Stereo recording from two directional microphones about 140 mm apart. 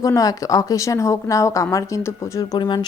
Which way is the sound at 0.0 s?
25° left (ahead or behind).